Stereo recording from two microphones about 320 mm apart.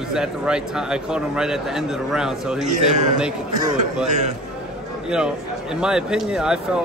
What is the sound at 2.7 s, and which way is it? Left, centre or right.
A man's voice, right.